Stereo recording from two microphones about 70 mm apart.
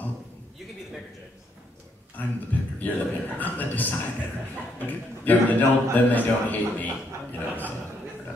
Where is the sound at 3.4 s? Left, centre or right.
Left.